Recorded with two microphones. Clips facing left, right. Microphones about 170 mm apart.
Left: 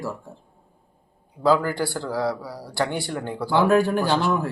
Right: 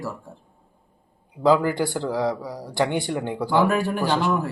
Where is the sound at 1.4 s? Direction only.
15° right (ahead or behind).